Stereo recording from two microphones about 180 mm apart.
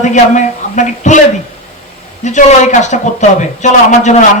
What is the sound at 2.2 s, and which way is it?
A woman's voice, 40° left (ahead or behind).